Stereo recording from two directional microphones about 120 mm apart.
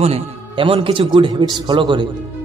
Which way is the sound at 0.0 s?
55° right (ahead or behind).